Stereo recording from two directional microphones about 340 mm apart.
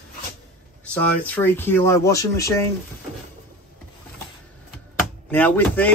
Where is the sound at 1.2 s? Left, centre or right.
Centre.